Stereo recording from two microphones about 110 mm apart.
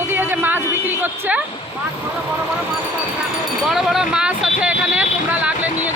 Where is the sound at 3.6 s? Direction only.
Centre (ahead or behind).